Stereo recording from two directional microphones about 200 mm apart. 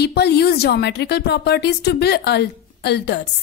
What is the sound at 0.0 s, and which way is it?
A woman's voice, 55° left (ahead or behind).